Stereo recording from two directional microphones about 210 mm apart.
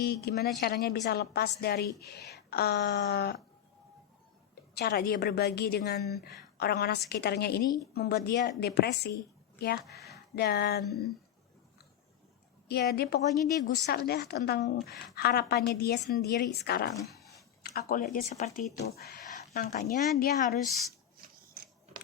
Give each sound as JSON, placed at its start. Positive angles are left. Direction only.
{"t": 0.0, "sound": "a woman's voice", "side_deg": 50}
{"t": 4.8, "sound": "a woman's voice", "side_deg": 50}
{"t": 12.6, "sound": "a woman's voice", "side_deg": 50}
{"t": 18.9, "sound": "speech", "side_deg": 50}